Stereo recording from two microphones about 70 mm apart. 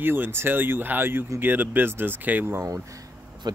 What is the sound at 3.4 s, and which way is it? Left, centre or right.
Speech, right.